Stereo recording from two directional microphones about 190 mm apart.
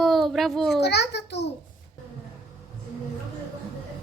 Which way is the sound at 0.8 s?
60° left (ahead or behind).